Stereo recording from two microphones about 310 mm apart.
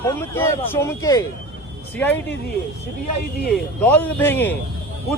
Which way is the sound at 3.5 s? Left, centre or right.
Centre.